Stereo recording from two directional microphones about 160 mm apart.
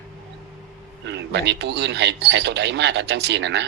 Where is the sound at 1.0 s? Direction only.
90° right.